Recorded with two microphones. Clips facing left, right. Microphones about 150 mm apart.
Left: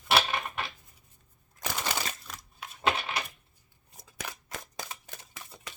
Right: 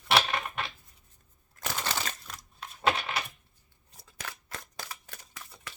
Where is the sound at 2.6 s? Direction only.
10° left (ahead or behind).